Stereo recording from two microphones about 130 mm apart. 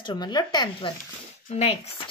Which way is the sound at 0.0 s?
35° left (ahead or behind).